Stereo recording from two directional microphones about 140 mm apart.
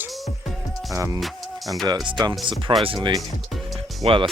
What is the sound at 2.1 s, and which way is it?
Speech, 30° right (ahead or behind).